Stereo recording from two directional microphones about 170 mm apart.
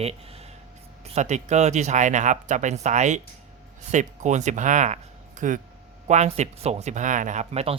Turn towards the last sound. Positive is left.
turn(degrees=-40)  # may be behind; listen again after turning